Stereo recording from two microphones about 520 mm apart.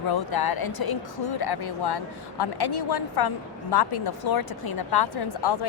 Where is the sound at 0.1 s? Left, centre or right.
Left.